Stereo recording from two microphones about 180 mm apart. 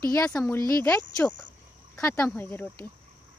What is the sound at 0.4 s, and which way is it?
Speech, 20° left (ahead or behind).